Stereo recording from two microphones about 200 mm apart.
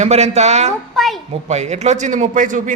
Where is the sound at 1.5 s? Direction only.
35° right (ahead or behind).